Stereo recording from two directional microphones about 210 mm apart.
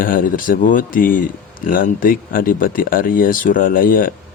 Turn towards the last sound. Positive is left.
turn(degrees=40)  # may be behind; listen again after turning